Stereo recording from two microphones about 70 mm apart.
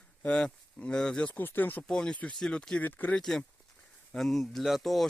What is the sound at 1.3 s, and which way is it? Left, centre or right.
Speech, left.